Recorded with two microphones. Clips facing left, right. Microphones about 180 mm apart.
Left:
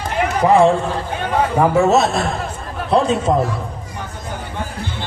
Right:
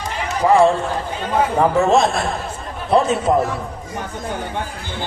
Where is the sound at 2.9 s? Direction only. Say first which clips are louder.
Even; 5° right (ahead or behind).